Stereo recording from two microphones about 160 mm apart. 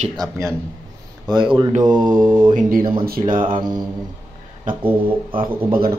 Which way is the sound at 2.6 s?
60° right (ahead or behind).